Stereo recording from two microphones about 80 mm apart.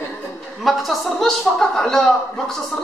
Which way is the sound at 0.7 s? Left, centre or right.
Centre.